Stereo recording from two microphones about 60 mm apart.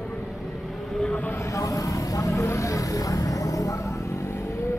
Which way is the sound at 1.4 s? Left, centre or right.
Left.